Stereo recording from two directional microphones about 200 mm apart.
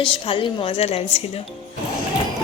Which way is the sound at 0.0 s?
25° left (ahead or behind).